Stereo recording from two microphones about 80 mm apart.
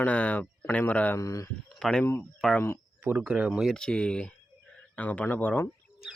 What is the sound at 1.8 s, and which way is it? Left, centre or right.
Speech, centre.